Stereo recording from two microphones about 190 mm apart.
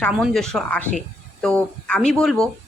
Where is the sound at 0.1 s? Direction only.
Centre (ahead or behind).